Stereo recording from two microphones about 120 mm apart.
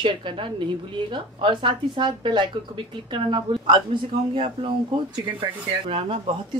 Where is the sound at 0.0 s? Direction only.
45° right (ahead or behind).